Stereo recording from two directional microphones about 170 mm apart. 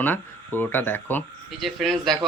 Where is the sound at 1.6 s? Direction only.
Centre (ahead or behind).